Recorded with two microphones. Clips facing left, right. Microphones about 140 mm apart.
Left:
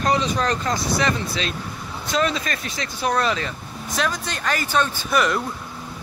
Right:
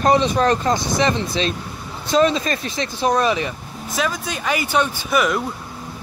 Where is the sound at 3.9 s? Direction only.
5° right (ahead or behind).